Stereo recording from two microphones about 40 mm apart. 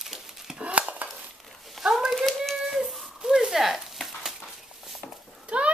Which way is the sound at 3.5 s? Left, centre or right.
Centre.